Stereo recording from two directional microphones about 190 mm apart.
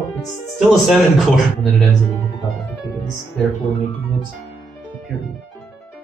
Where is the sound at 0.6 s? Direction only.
Centre (ahead or behind).